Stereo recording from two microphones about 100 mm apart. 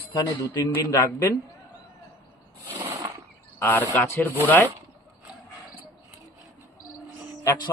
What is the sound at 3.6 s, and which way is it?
Speech, 20° left (ahead or behind).